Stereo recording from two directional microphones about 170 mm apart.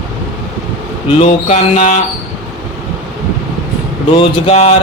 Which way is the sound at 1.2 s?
40° left (ahead or behind).